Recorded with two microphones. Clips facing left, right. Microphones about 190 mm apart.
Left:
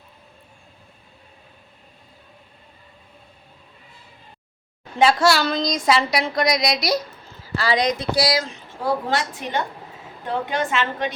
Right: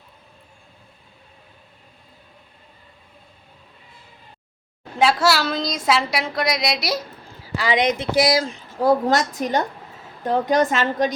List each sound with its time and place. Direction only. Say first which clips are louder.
4.9 s a woman's voice: left 1 dB; centre (ahead or behind)
7.5 s a woman's voice: right 1 dB; 15° right (ahead or behind); by 11.1 s 40° right (ahead or behind)